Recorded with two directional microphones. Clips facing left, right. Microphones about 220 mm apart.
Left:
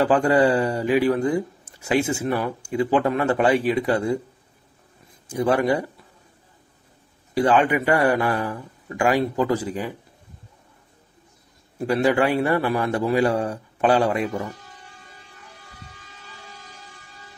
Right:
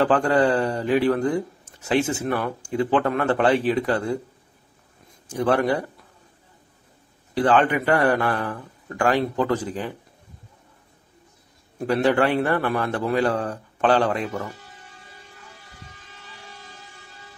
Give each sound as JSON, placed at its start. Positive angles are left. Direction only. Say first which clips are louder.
{"t": 0.0, "sound": "a man's voice", "louder": "left 1 dB", "side_deg": 10}
{"t": 5.3, "sound": "a man's voice", "louder": "left 1 dB", "side_deg": 10}
{"t": 7.3, "sound": "a man's voice", "louder": "left 1 dB", "side_deg": 10}
{"t": 11.8, "sound": "a man's voice", "louder": "even", "side_deg": 10}